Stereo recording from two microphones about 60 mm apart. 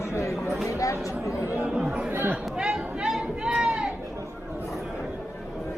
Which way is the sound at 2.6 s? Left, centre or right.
Centre.